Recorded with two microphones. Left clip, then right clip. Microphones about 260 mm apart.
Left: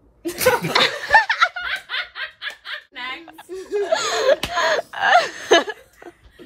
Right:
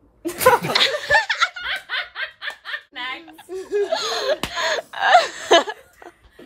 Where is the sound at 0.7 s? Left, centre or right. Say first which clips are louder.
Left 2 dB; centre.